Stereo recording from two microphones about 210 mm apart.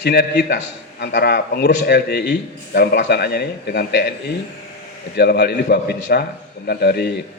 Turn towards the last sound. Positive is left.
turn(degrees=50)  # may be behind; listen again after turning